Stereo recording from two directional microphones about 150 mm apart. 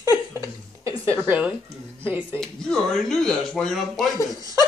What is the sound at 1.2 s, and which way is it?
Speech, 10° right (ahead or behind).